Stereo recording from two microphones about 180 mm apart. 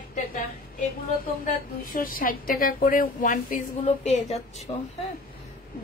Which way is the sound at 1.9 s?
50° left (ahead or behind).